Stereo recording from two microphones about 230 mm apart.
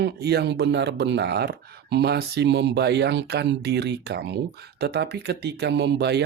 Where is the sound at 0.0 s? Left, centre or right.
Right.